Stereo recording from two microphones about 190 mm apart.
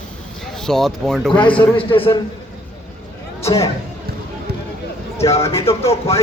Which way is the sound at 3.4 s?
15° left (ahead or behind).